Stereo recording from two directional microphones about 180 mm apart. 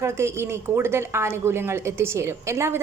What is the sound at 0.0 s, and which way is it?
A woman's voice, 15° right (ahead or behind).